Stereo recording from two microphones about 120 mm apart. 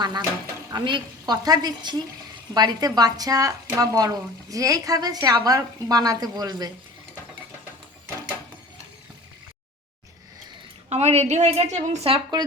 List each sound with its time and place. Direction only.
0.0 s a woman's voice: 35° right (ahead or behind)
10.8 s a woman's voice: 65° right (ahead or behind)
12.1 s speech: 35° right (ahead or behind)